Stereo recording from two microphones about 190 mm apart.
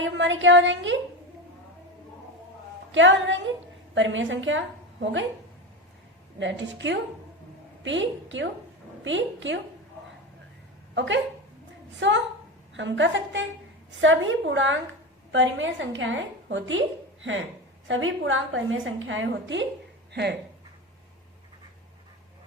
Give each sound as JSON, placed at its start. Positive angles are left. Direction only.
{"t": 0.0, "sound": "a woman's voice", "side_deg": -75}
{"t": 2.9, "sound": "a woman's voice", "side_deg": -80}
{"t": 6.4, "sound": "a woman's voice", "side_deg": -70}
{"t": 10.9, "sound": "a woman's voice", "side_deg": -70}
{"t": 14.0, "sound": "a woman's voice", "side_deg": -90}